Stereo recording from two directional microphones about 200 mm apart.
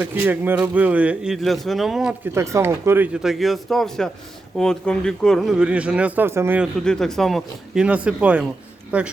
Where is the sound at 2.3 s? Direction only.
15° right (ahead or behind).